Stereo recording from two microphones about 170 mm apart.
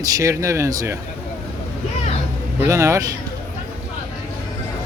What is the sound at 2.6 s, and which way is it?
Speech, 15° right (ahead or behind).